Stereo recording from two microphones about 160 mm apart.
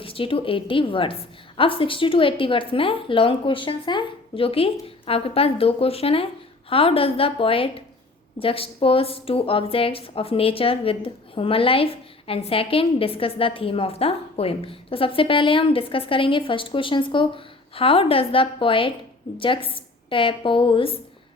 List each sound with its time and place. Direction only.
0.0 s a woman's voice: 35° left (ahead or behind)